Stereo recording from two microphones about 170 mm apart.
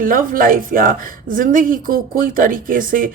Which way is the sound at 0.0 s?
55° right (ahead or behind).